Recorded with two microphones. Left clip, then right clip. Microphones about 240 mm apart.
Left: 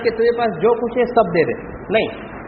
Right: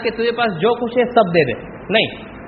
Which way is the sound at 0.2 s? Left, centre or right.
Right.